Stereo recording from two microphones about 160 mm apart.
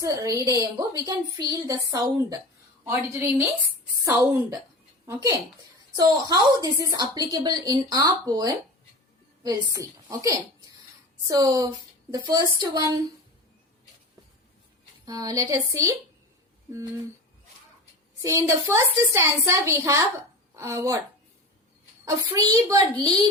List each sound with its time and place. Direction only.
0.0 s a woman's voice: 20° right (ahead or behind)
2.8 s a woman's voice: 15° right (ahead or behind)
6.0 s a woman's voice: 20° right (ahead or behind)
15.0 s a woman's voice: 20° right (ahead or behind)
18.2 s a woman's voice: 20° right (ahead or behind)
22.0 s a woman's voice: 20° right (ahead or behind)